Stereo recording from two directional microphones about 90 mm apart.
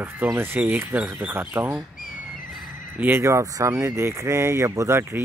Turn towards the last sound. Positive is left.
turn(degrees=-30)  # may be behind; listen again after turning